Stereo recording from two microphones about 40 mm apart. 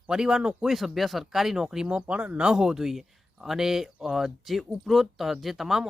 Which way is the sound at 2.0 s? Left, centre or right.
Right.